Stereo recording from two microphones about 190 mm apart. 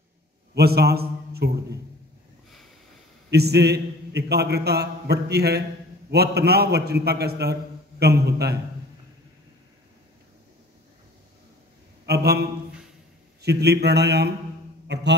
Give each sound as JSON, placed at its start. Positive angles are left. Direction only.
{"t": 0.6, "sound": "a man's voice", "side_deg": -55}
{"t": 3.3, "sound": "a man's voice", "side_deg": -60}
{"t": 12.1, "sound": "a man's voice", "side_deg": -55}